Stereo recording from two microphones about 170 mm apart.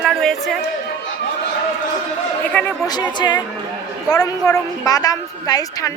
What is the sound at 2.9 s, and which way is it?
A woman's voice, 25° left (ahead or behind).